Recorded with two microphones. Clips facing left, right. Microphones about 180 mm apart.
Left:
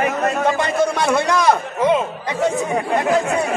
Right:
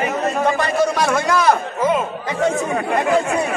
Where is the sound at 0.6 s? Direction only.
25° left (ahead or behind).